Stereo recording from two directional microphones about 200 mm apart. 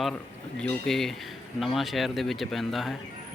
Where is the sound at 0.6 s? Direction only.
5° left (ahead or behind).